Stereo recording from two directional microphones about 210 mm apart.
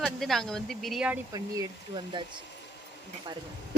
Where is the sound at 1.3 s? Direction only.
20° right (ahead or behind).